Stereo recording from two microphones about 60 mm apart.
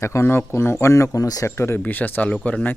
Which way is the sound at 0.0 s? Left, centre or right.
Left.